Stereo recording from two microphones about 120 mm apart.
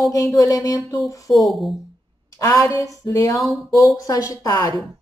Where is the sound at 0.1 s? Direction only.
30° left (ahead or behind).